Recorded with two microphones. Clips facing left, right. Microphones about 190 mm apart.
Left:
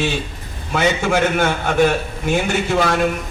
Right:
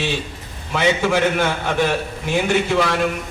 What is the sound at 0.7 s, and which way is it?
A man's voice, 50° left (ahead or behind).